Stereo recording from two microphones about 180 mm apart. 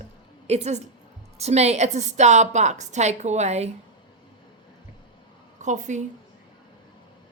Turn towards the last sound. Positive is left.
turn(degrees=-45)  # may be behind; listen again after turning